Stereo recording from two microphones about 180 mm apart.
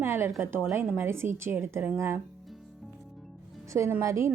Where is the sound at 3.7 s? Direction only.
15° right (ahead or behind).